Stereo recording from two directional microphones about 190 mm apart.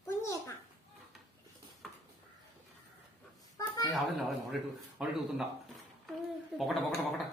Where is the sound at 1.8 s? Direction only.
Centre (ahead or behind).